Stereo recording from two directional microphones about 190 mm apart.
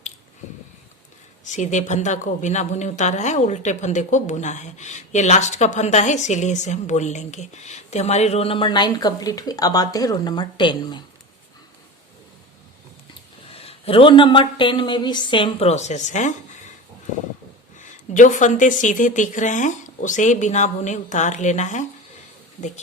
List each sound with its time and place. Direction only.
1.5 s speech: 40° left (ahead or behind); by 11.0 s 25° left (ahead or behind)
13.5 s speech: 30° left (ahead or behind)
17.7 s speech: 40° left (ahead or behind)